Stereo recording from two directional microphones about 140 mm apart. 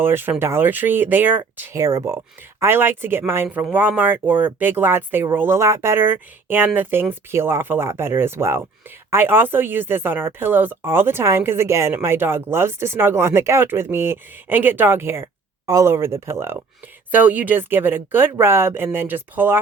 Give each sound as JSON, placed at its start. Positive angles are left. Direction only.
{"t": 0.0, "sound": "speech", "side_deg": -15}